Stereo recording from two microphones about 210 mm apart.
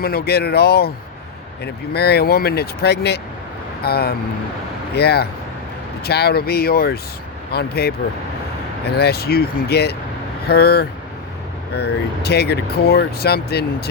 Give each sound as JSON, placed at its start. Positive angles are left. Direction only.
{"t": 0.0, "sound": "speech", "side_deg": 45}